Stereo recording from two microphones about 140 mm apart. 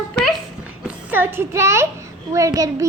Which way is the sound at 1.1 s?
15° right (ahead or behind).